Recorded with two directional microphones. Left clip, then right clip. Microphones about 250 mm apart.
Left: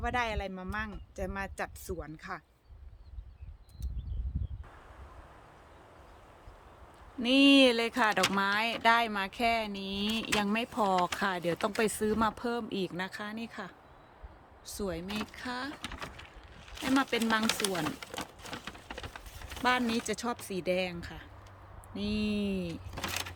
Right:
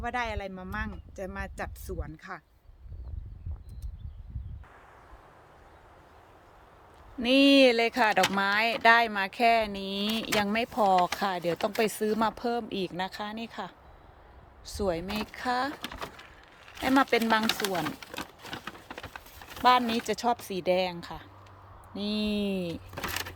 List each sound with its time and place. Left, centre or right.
0.0 s speech: centre
7.2 s speech: centre
15.9 s speech: right
16.6 s crumpling: centre
19.6 s speech: centre